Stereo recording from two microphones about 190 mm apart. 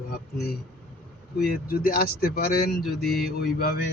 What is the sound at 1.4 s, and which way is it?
Speech, 50° left (ahead or behind).